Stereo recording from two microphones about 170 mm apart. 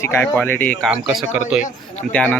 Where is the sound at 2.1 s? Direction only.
10° left (ahead or behind).